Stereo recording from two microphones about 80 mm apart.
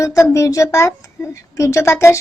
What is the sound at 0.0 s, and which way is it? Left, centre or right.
A woman's voice, left.